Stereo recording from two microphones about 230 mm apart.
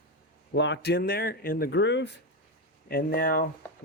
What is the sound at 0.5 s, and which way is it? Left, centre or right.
Speech, left.